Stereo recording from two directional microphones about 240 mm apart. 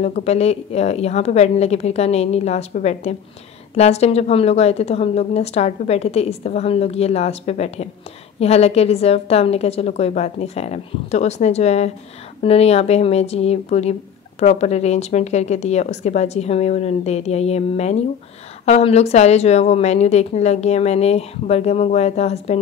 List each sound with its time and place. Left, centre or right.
0.0 s a woman's voice: left